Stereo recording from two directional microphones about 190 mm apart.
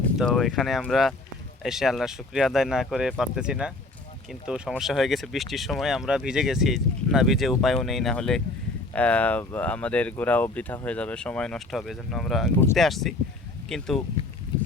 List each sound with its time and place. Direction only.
0.2 s speech: centre (ahead or behind)